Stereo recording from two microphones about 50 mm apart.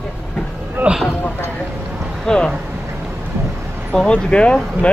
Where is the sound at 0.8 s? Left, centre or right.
Right.